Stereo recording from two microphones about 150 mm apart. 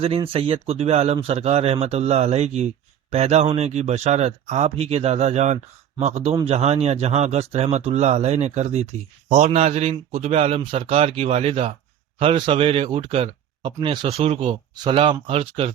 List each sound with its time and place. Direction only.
0.0 s speech: 40° right (ahead or behind)